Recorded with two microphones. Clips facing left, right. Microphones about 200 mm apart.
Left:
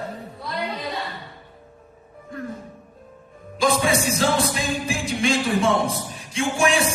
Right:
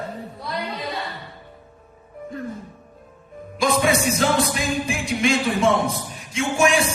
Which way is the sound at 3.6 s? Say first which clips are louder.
Right 1 dB; 30° left (ahead or behind).